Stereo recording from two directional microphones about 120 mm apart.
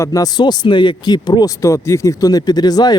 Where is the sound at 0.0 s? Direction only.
30° left (ahead or behind).